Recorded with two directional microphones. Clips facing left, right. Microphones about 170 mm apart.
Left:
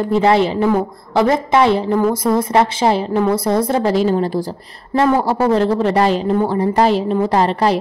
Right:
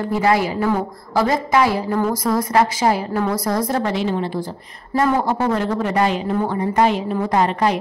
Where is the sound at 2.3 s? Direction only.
25° left (ahead or behind).